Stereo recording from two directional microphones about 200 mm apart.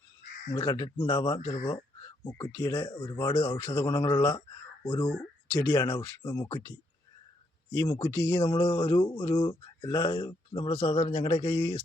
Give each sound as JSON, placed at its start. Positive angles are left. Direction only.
{"t": 0.5, "sound": "speech", "side_deg": 20}
{"t": 1.6, "sound": "a sound", "side_deg": 20}
{"t": 2.3, "sound": "speech", "side_deg": 20}